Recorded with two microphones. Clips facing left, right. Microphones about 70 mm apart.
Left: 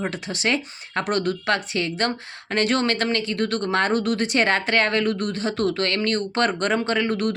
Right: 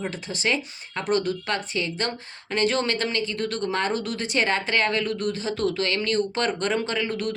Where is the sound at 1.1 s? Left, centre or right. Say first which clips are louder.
Left 1 dB; left.